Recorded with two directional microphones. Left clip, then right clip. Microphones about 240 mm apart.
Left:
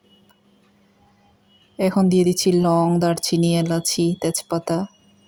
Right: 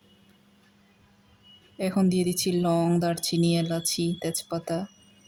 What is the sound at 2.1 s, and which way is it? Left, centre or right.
Speech, centre.